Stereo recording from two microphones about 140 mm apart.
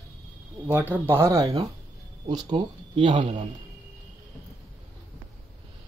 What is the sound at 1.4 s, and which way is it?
A man's voice, 30° right (ahead or behind).